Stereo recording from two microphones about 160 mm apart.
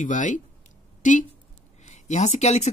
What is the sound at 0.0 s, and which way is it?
Speech, 50° left (ahead or behind).